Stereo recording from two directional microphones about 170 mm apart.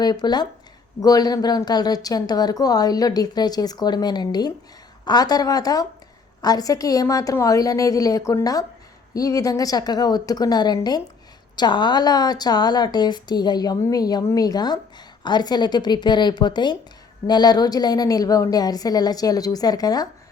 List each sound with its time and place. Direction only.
0.0 s a woman's voice: 25° left (ahead or behind)